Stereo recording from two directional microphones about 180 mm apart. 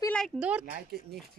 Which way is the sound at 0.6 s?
55° right (ahead or behind).